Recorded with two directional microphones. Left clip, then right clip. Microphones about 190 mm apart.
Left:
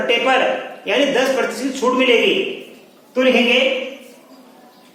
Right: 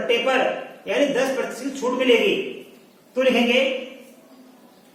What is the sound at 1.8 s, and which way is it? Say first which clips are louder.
Speech: left 6 dB; 35° left (ahead or behind).